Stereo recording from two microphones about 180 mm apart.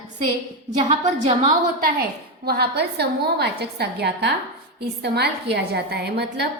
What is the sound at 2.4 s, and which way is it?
A woman's voice, 60° right (ahead or behind).